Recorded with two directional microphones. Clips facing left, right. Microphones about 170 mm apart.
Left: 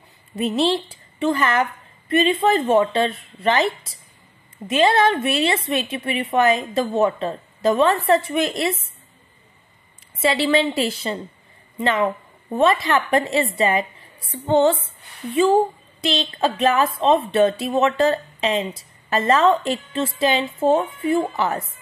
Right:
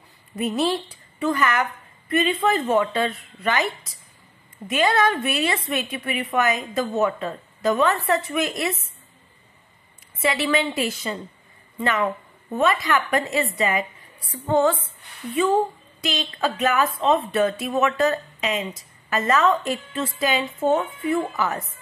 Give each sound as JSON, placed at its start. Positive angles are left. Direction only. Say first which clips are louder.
{"t": 0.4, "sound": "a woman's voice", "louder": "left 3 dB", "side_deg": 25}
{"t": 10.2, "sound": "a woman's voice", "louder": "left 4 dB", "side_deg": 25}